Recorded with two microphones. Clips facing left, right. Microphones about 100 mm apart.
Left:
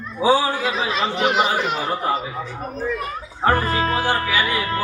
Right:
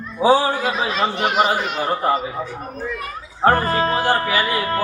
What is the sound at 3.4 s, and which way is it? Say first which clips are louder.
A man's voice: right 3 dB; 40° right (ahead or behind).